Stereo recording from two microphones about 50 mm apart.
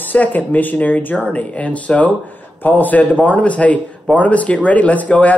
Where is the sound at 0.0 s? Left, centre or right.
Left.